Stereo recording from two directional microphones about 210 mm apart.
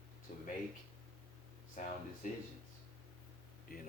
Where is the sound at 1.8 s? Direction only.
40° left (ahead or behind).